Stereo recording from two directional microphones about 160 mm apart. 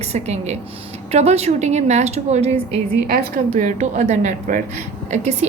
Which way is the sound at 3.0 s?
70° right (ahead or behind).